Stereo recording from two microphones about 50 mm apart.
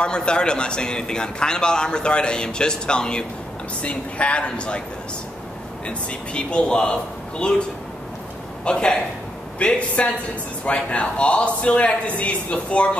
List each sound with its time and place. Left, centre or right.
0.0 s a man's voice: centre
5.9 s speech: centre
8.6 s a man's voice: centre